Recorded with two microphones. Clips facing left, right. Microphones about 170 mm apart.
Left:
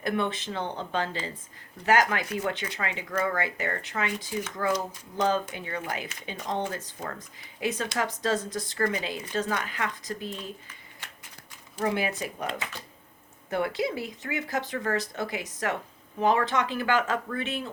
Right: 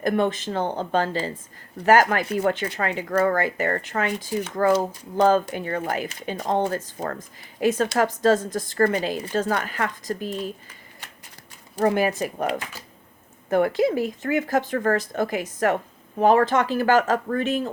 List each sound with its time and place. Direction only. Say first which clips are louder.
0.0 s speech: right 6 dB; 45° right (ahead or behind)
5.1 s speech: right 8 dB; 55° right (ahead or behind)
9.0 s speech: right 6 dB; 40° right (ahead or behind)
11.8 s speech: right 7 dB; 45° right (ahead or behind)
13.5 s speech: right 8 dB; 45° right (ahead or behind)